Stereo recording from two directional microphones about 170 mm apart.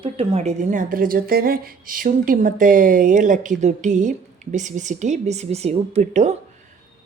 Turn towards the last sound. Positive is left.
turn(degrees=-40)  # may be behind; listen again after turning